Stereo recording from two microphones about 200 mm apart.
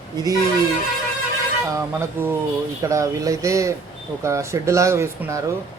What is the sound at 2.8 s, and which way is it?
Speech, 15° right (ahead or behind).